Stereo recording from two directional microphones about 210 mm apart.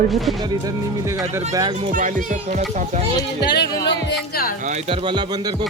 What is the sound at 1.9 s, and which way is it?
Speech, 40° right (ahead or behind).